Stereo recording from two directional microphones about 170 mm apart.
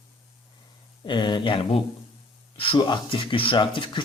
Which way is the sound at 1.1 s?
25° left (ahead or behind).